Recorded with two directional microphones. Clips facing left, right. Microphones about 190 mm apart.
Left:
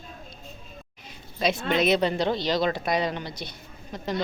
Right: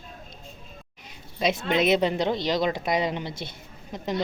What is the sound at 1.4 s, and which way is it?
Speech, 20° right (ahead or behind).